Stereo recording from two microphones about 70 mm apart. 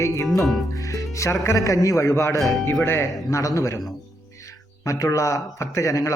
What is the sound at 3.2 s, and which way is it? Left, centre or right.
Speech, left.